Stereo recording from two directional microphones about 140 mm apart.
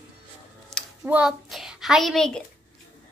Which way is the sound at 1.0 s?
10° right (ahead or behind).